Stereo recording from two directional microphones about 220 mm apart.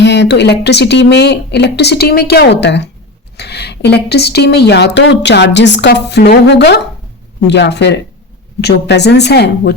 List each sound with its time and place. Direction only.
0.0 s a woman's voice: 50° left (ahead or behind)